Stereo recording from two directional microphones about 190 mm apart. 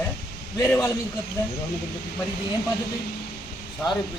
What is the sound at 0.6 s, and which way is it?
Speech, 15° left (ahead or behind).